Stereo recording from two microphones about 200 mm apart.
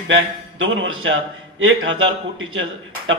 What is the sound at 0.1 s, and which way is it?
A man's voice, 70° right (ahead or behind).